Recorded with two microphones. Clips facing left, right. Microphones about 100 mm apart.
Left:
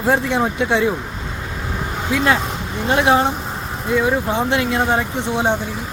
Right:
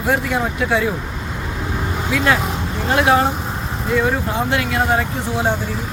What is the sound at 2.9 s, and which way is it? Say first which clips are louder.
Speech: even; 25° left (ahead or behind).